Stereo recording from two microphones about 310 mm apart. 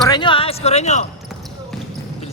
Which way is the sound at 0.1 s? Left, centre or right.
Centre.